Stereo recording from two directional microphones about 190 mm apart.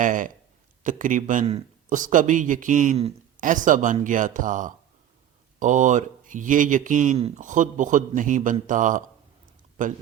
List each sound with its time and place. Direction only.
0.0 s speech: 45° right (ahead or behind)